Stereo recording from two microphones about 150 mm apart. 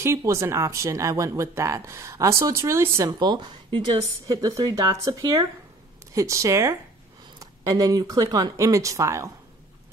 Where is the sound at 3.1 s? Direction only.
30° right (ahead or behind).